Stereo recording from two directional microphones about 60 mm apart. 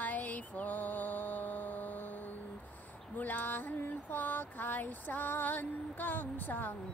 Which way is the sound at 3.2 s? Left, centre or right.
Left.